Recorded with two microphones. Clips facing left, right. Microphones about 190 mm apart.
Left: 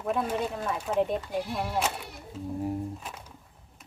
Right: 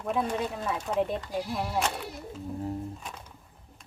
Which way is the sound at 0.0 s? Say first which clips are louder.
Even; centre (ahead or behind).